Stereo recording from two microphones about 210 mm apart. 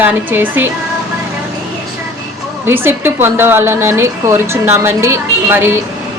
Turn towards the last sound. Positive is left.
turn(degrees=-10)  # may be behind; listen again after turning